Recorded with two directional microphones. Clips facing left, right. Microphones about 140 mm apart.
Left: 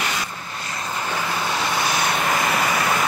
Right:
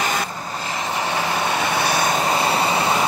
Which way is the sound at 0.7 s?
90° right.